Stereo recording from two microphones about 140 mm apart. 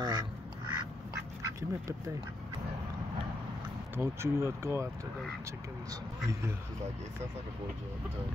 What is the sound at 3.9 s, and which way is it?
Speech, 20° right (ahead or behind).